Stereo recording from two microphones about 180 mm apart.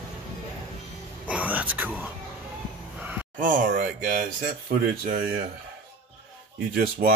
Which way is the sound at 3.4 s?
45° right (ahead or behind).